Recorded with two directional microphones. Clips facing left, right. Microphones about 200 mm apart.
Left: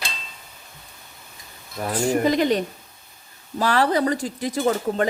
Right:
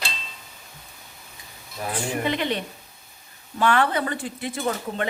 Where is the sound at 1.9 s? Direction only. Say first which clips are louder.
Left 6 dB; 40° left (ahead or behind).